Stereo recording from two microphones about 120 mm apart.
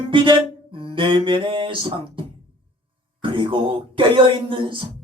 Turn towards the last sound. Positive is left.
turn(degrees=-45)  # may be behind; listen again after turning